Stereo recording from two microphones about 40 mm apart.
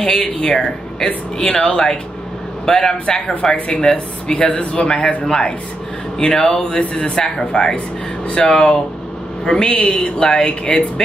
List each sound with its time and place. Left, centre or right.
0.0 s a man's voice: centre
6.7 s speech: left
7.1 s speech: centre